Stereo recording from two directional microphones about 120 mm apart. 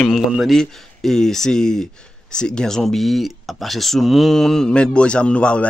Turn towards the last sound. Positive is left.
turn(degrees=10)  # may be behind; listen again after turning